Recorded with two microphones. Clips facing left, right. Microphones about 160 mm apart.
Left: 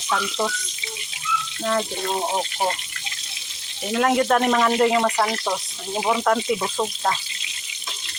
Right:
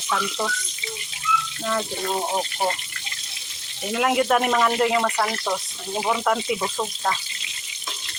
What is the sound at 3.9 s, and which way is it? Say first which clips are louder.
Speech: left 1 dB; 10° right (ahead or behind).